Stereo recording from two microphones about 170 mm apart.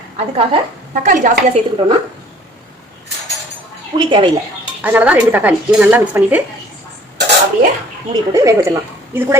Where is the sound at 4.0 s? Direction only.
30° right (ahead or behind).